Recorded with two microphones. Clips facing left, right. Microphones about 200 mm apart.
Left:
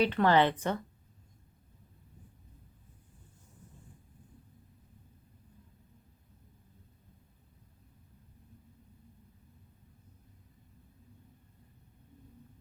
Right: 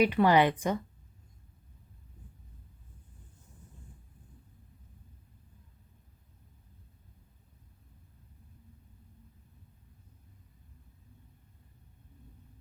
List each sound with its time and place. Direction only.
0.0 s a woman's voice: 10° right (ahead or behind)